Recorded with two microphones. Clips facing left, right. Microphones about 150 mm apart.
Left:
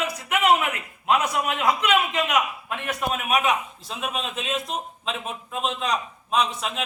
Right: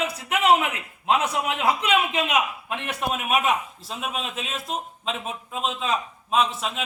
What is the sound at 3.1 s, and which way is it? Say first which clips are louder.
A man's voice: even; 5° right (ahead or behind).